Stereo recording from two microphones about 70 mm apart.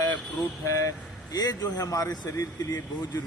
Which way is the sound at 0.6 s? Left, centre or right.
Left.